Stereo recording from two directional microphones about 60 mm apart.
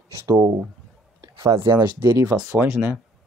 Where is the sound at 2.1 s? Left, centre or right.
Right.